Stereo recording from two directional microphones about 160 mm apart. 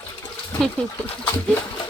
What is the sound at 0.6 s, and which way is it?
Speech, 10° left (ahead or behind).